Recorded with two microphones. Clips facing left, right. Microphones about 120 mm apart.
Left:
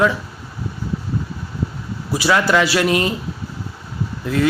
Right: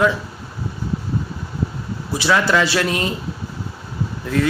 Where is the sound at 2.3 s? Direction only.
15° left (ahead or behind).